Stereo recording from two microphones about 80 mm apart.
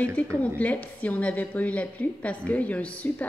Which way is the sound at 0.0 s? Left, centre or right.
Centre.